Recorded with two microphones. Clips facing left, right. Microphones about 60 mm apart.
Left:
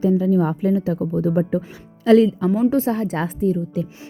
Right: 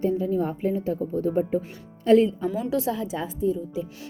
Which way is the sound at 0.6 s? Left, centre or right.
Left.